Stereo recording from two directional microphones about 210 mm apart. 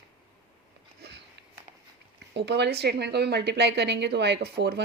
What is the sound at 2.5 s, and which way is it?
A woman's voice, 55° right (ahead or behind).